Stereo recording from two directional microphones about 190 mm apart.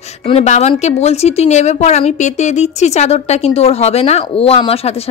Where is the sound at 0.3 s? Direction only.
35° left (ahead or behind).